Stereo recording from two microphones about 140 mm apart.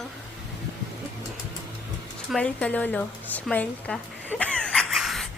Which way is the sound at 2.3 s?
10° left (ahead or behind).